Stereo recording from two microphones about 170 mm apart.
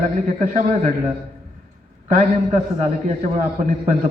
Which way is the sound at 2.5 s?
40° right (ahead or behind).